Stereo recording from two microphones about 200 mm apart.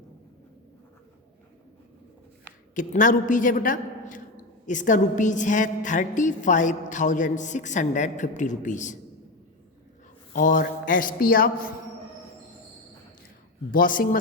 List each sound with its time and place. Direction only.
2.7 s a woman's voice: 40° left (ahead or behind)
10.3 s a woman's voice: 40° left (ahead or behind)
13.7 s a woman's voice: 45° left (ahead or behind)